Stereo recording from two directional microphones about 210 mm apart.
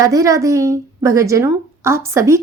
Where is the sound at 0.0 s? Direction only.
15° right (ahead or behind).